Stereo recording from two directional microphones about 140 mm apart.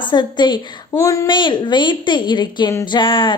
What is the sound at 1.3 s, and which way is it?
A woman's voice, 35° left (ahead or behind).